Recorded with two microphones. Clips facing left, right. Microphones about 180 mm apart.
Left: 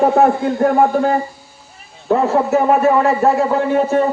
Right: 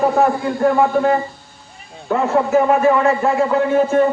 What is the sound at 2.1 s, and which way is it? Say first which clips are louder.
A man's voice: left 1 dB; 40° left (ahead or behind).